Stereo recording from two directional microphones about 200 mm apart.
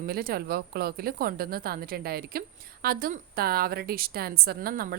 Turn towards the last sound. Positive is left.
turn(degrees=-45)  # may be behind; listen again after turning